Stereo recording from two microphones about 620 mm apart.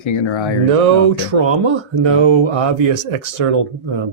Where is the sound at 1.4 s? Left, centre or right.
Right.